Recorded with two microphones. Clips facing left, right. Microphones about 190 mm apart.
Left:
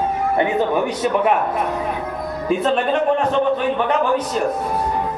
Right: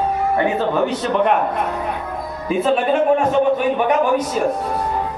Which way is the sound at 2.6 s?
5° right (ahead or behind).